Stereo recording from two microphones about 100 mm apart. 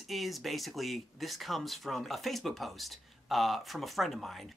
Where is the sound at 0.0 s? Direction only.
Centre (ahead or behind).